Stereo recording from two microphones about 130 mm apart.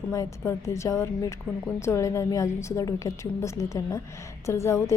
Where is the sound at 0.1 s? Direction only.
25° left (ahead or behind).